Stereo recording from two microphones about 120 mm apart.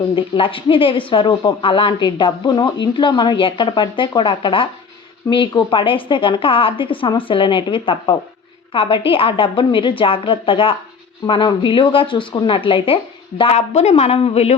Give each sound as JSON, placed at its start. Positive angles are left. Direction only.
{"t": 0.2, "sound": "speech", "side_deg": 45}
{"t": 13.4, "sound": "a woman's voice", "side_deg": 60}